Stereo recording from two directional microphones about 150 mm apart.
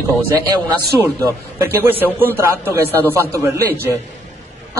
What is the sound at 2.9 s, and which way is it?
Speech, 15° left (ahead or behind).